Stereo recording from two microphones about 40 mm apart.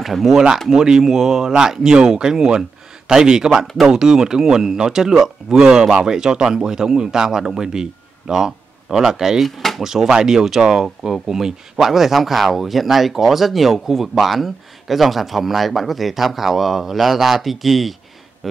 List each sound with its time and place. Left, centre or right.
0.0 s speech: centre
9.4 s speech: centre
9.8 s speech: centre